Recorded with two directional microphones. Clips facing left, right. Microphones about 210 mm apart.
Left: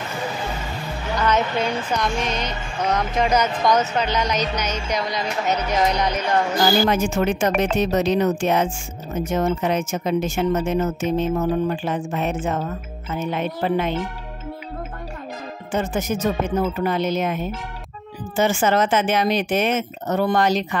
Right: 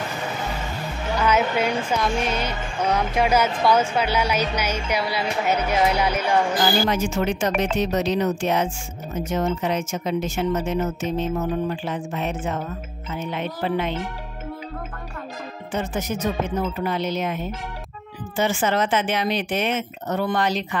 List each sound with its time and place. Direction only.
1.1 s speech: 10° right (ahead or behind)
6.9 s speech: 50° left (ahead or behind)
15.7 s speech: 45° left (ahead or behind)